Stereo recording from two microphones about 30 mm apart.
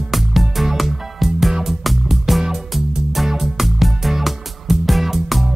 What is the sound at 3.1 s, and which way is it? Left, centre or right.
Music, centre.